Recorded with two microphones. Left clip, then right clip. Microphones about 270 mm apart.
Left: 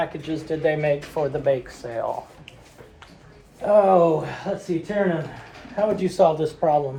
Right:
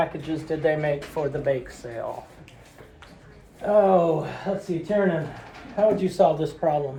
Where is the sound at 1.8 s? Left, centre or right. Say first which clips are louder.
Left 5 dB; centre.